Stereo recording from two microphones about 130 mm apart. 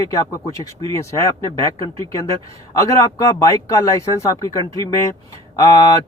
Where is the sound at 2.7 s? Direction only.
25° left (ahead or behind).